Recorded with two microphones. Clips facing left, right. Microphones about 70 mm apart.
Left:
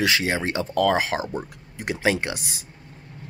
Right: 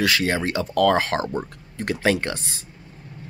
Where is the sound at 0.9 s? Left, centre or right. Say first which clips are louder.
Right 2 dB; centre.